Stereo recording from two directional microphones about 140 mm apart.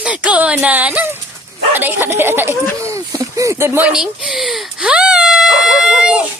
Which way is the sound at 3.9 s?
5° right (ahead or behind).